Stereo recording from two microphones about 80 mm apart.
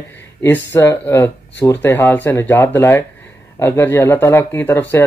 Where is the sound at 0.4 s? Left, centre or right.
Left.